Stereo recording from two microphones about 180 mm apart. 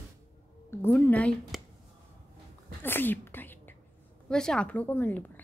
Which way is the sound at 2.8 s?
10° left (ahead or behind).